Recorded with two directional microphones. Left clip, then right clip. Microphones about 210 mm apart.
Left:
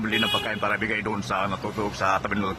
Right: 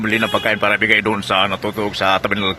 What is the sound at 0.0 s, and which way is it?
Speech, 20° right (ahead or behind).